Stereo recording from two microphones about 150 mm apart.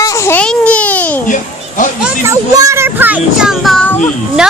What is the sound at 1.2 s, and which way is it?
Children playing, 60° left (ahead or behind).